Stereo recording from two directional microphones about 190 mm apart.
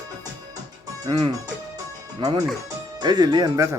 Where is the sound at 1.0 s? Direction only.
25° right (ahead or behind).